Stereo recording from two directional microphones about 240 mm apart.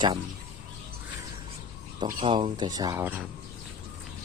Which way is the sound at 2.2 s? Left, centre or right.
Right.